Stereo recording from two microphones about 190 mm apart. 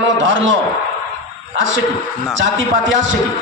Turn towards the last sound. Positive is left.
turn(degrees=-85)